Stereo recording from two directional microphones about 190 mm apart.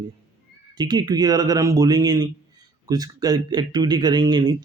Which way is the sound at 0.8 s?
20° right (ahead or behind).